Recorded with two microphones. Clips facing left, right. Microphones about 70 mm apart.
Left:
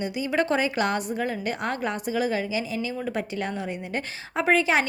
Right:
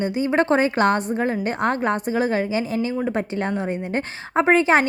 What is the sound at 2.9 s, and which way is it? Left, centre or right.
A woman's voice, right.